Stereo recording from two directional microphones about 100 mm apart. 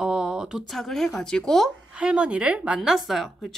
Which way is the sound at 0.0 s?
5° right (ahead or behind).